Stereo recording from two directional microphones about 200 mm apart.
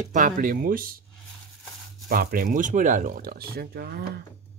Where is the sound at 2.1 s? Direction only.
45° right (ahead or behind).